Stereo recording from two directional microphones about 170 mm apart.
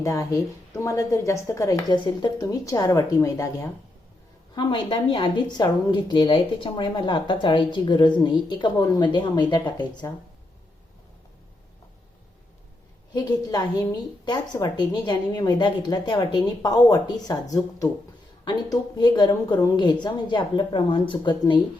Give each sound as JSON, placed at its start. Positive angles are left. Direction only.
{"t": 0.0, "sound": "a woman's voice", "side_deg": 20}
{"t": 13.1, "sound": "a woman's voice", "side_deg": 25}
{"t": 17.8, "sound": "speech", "side_deg": 5}
{"t": 18.4, "sound": "a woman's voice", "side_deg": 25}